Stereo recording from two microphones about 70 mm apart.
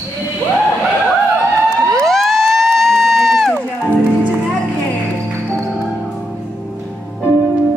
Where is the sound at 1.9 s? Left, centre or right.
Centre.